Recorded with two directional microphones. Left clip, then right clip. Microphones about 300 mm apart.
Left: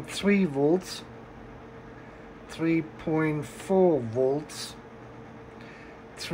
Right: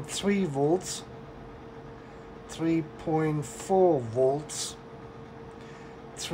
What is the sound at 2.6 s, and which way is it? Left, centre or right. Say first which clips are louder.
Speech: left 1 dB; centre.